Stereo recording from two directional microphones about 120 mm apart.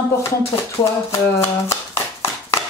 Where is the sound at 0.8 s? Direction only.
55° left (ahead or behind).